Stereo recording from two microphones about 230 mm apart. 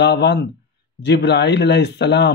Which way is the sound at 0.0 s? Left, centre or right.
Left.